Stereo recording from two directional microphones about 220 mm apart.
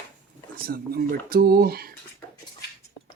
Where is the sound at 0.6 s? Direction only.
40° right (ahead or behind).